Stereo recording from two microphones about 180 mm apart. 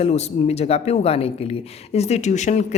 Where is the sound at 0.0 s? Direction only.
35° left (ahead or behind).